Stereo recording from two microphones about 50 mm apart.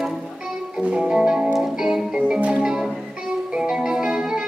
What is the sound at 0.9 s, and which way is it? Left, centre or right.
Music, centre.